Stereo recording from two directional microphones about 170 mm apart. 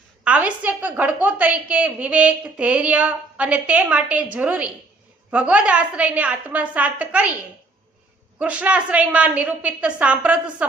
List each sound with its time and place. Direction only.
0.3 s a woman's voice: 10° right (ahead or behind)
8.4 s a woman's voice: 10° right (ahead or behind)